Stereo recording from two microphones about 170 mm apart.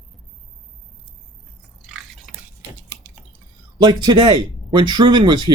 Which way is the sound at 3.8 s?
25° right (ahead or behind).